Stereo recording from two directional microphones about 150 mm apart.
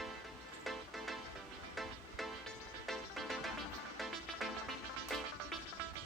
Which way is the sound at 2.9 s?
Centre (ahead or behind).